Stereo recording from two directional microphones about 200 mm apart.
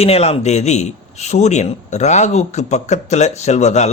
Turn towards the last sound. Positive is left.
turn(degrees=35)  # may be behind; listen again after turning